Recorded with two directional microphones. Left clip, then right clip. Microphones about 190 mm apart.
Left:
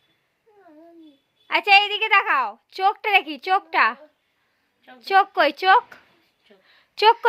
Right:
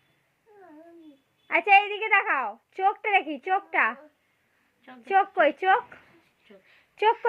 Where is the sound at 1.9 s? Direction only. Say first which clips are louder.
Left 5 dB; 25° left (ahead or behind).